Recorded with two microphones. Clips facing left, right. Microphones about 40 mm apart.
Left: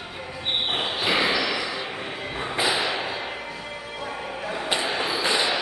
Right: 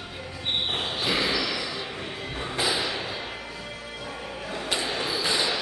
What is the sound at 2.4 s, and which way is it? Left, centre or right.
Music, left.